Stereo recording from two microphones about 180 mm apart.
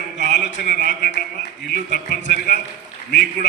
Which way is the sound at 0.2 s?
70° left (ahead or behind).